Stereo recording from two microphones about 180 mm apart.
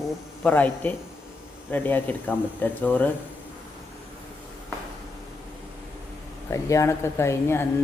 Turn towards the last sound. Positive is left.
turn(degrees=15)  # may be behind; listen again after turning